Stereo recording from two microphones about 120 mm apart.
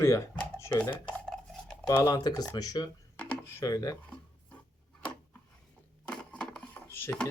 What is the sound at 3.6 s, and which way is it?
Speech, 30° left (ahead or behind).